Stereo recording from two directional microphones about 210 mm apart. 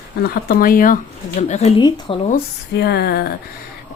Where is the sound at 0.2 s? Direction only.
45° left (ahead or behind); by 2.1 s 25° left (ahead or behind).